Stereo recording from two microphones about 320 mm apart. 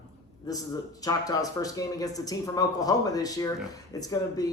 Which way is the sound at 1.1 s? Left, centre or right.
Centre.